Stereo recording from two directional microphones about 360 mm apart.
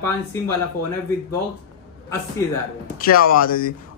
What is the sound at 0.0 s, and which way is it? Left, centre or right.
Speech, centre.